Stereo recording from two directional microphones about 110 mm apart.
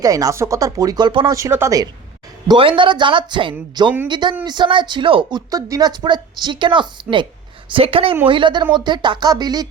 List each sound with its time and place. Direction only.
0.0 s a woman's voice: 35° right (ahead or behind)
1.3 s speech: 25° right (ahead or behind)
2.6 s speech: 50° right (ahead or behind)
5.5 s a woman's voice: 30° right (ahead or behind)
7.7 s a woman's voice: 55° right (ahead or behind); by 9.6 s 35° right (ahead or behind)